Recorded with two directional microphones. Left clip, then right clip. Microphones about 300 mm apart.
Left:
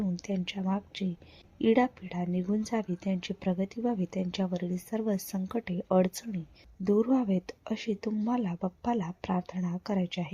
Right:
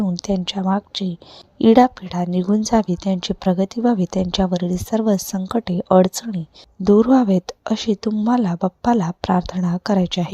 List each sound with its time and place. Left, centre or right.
0.0 s speech: right